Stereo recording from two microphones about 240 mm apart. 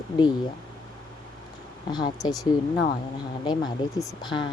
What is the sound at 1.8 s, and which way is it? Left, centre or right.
Speech, centre.